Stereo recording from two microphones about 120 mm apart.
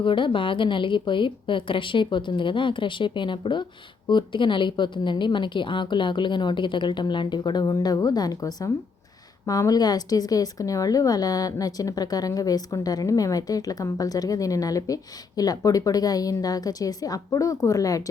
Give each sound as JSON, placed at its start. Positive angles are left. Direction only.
{"t": 0.0, "sound": "a woman's voice", "side_deg": 45}